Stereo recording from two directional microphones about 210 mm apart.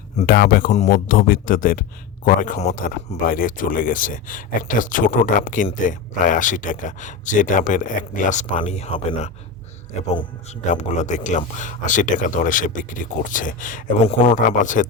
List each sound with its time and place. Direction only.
0.2 s speech: 45° left (ahead or behind)
10.7 s speech: 35° left (ahead or behind)